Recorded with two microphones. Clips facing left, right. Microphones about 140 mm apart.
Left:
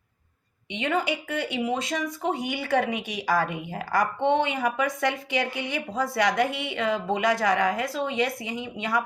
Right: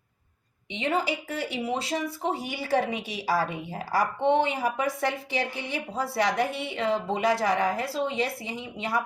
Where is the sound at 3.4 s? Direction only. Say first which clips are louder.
Left 1 dB; 55° left (ahead or behind).